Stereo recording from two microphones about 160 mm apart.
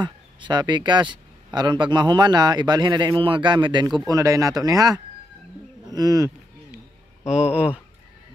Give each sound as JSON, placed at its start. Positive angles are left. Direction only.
{"t": 0.0, "sound": "speech", "side_deg": -30}
{"t": 7.2, "sound": "speech", "side_deg": -5}